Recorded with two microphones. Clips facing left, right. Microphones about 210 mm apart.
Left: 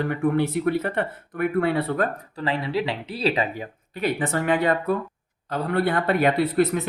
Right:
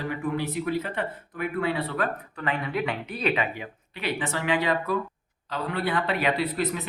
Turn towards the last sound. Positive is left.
turn(degrees=45)  # may be behind; listen again after turning